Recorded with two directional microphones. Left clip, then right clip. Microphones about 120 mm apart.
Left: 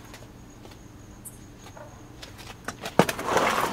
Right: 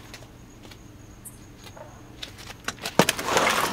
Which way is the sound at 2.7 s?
35° right (ahead or behind).